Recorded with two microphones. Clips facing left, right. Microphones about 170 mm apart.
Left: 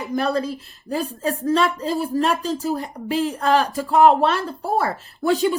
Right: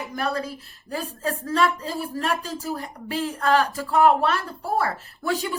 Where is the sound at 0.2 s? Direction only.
20° left (ahead or behind).